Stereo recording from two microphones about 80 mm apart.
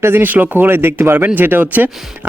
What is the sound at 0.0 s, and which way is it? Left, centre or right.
Speech, right.